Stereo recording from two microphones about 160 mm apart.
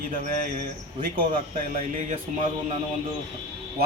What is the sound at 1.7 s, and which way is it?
Speech, 55° right (ahead or behind).